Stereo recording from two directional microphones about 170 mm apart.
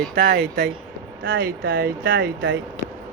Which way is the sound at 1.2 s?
90° right.